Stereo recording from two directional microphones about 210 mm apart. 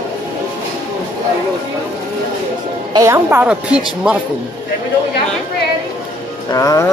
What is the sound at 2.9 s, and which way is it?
Speech, 15° right (ahead or behind).